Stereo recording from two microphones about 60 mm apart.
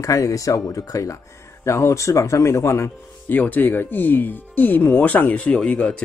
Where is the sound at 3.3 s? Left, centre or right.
Left.